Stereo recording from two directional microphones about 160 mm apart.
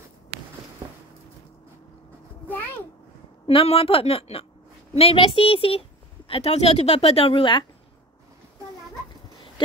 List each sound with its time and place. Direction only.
3.4 s speech: 35° left (ahead or behind)